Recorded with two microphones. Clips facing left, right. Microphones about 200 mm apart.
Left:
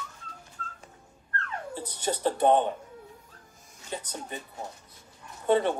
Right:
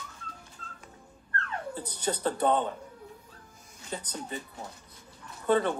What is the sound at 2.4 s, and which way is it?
Speech, 20° left (ahead or behind).